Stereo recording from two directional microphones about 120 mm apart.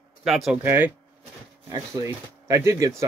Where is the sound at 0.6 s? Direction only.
15° right (ahead or behind).